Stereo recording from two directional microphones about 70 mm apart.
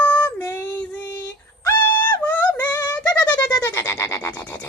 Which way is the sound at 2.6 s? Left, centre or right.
Left.